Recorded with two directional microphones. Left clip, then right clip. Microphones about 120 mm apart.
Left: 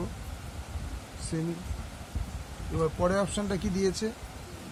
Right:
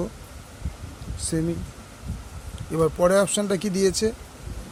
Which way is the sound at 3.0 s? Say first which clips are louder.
Right 10 dB; 90° right.